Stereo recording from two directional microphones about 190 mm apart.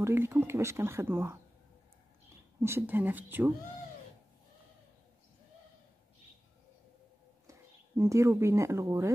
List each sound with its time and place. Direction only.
0.0 s speech: 10° right (ahead or behind)
2.6 s speech: 10° right (ahead or behind)
7.4 s speech: 15° right (ahead or behind)